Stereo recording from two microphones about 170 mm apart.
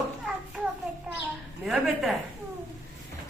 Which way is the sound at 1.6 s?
Centre (ahead or behind).